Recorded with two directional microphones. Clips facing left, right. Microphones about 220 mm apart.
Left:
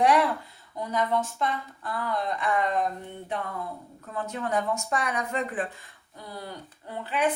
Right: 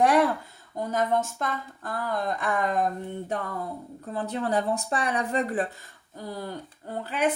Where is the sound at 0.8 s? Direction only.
45° right (ahead or behind).